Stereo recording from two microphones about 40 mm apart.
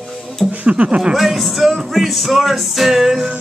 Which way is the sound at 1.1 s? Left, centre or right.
Centre.